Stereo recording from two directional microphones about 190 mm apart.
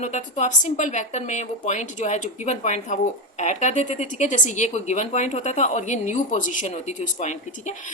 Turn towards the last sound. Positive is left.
turn(degrees=40)  # may be behind; listen again after turning